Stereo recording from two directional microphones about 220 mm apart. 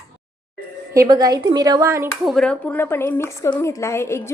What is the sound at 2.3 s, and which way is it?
A woman's voice, 5° left (ahead or behind).